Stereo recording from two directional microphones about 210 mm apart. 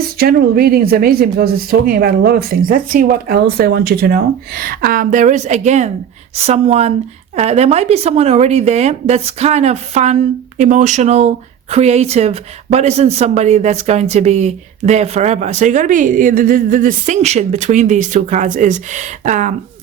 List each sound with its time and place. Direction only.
0.2 s speech: 45° right (ahead or behind)